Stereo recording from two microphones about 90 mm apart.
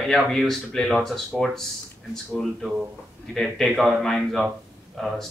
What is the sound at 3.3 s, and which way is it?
Speech, centre (ahead or behind).